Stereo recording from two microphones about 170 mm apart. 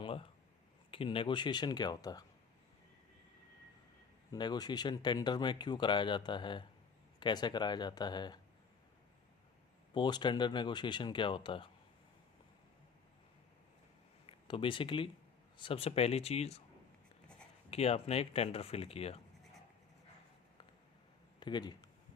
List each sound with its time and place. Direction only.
0.0 s a sound: 30° left (ahead or behind)
0.9 s speech: 30° left (ahead or behind)
4.3 s speech: 25° left (ahead or behind)
9.9 s speech: 25° left (ahead or behind)
14.3 s speech: 30° left (ahead or behind)
17.7 s speech: 35° left (ahead or behind)
21.3 s speech: 25° left (ahead or behind)